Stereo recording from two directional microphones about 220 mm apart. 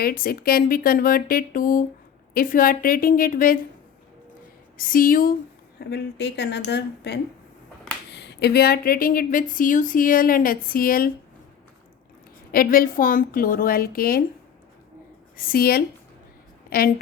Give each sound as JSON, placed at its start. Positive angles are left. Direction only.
{"t": 0.0, "sound": "speech", "side_deg": 40}
{"t": 4.8, "sound": "speech", "side_deg": 40}
{"t": 5.8, "sound": "speech", "side_deg": 50}
{"t": 12.5, "sound": "speech", "side_deg": 40}
{"t": 15.4, "sound": "a woman's voice", "side_deg": 40}